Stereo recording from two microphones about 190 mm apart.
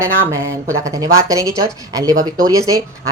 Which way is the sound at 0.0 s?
15° right (ahead or behind).